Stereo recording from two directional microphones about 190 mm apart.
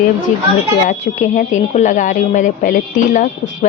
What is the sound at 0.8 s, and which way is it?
A woman's voice, 40° left (ahead or behind).